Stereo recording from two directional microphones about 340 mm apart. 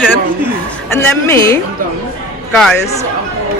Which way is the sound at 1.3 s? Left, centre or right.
Centre.